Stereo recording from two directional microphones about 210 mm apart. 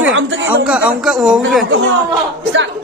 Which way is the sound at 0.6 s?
5° right (ahead or behind).